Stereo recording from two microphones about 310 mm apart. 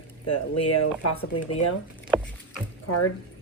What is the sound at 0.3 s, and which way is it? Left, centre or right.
Speech, left.